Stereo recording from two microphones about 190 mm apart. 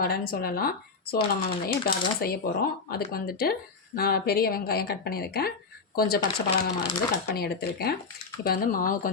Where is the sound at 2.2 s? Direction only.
55° left (ahead or behind).